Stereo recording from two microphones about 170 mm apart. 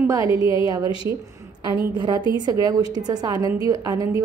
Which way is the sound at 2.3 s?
25° right (ahead or behind).